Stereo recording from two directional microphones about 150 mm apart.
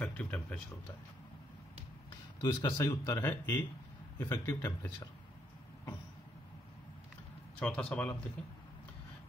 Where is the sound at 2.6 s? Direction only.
25° left (ahead or behind).